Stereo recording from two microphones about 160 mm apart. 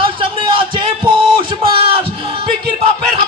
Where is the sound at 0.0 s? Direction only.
30° right (ahead or behind).